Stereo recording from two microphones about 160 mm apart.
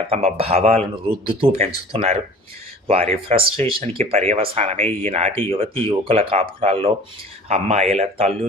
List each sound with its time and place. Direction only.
0.1 s speech: 40° right (ahead or behind)